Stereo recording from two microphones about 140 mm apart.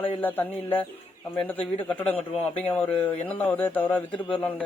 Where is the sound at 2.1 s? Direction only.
50° left (ahead or behind).